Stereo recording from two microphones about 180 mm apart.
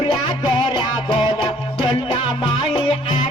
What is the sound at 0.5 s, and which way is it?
Music, 25° left (ahead or behind).